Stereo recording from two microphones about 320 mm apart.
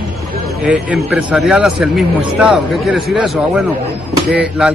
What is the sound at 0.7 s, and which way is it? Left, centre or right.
A man's voice, centre.